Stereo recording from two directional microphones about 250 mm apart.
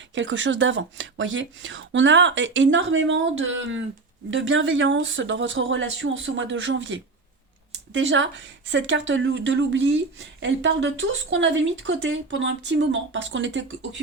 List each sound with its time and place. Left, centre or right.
0.1 s speech: right